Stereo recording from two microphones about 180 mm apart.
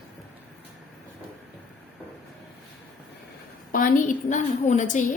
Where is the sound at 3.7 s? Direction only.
50° left (ahead or behind).